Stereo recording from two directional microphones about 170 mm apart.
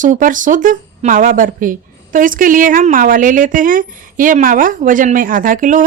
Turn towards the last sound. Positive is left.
turn(degrees=-50)  # may be behind; listen again after turning